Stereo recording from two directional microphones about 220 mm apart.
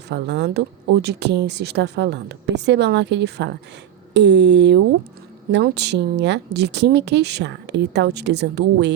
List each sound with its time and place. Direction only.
0.1 s speech: 50° right (ahead or behind)